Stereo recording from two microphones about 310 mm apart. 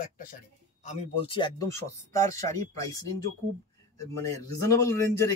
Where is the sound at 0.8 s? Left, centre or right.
Centre.